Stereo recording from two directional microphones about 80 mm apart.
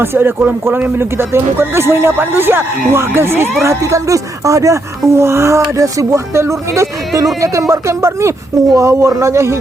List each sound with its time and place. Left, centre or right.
0.0 s speech: right